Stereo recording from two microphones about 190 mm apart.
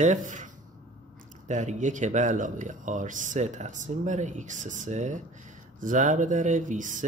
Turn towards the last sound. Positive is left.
turn(degrees=-40)  # may be behind; listen again after turning